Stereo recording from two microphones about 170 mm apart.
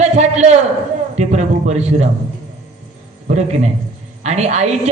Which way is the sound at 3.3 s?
40° right (ahead or behind).